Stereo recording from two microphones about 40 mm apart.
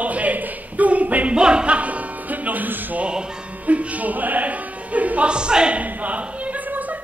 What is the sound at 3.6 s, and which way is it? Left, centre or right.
Speech, right.